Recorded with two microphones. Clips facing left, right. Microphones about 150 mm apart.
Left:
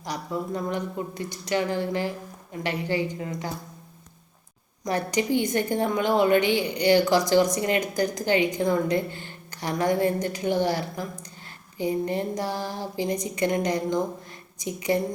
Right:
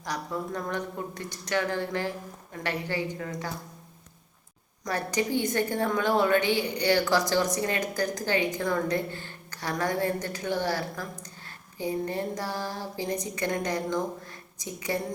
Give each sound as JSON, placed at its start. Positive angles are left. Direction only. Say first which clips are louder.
{"t": 0.0, "sound": "a woman's voice", "louder": "left 2 dB", "side_deg": 10}
{"t": 4.9, "sound": "a woman's voice", "louder": "left 4 dB", "side_deg": 15}